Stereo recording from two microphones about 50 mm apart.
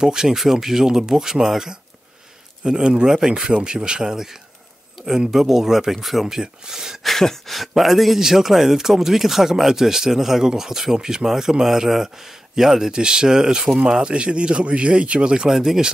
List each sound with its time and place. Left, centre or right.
0.0 s speech: centre
7.1 s speech: centre